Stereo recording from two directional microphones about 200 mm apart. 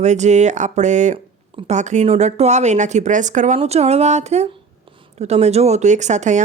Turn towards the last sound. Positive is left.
turn(degrees=-35)  # may be behind; listen again after turning